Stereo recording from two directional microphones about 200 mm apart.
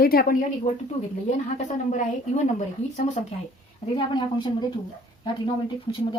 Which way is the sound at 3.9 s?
20° left (ahead or behind).